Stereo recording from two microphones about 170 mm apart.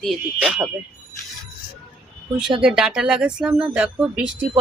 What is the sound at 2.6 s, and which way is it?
Speech, 5° right (ahead or behind).